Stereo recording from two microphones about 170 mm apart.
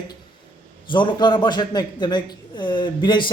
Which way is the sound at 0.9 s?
30° left (ahead or behind).